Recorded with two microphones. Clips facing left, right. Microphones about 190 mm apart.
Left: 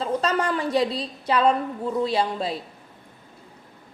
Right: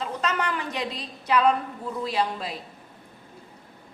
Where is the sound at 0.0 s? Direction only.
35° left (ahead or behind).